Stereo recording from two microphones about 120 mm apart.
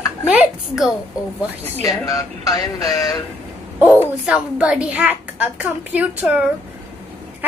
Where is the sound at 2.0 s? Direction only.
30° left (ahead or behind).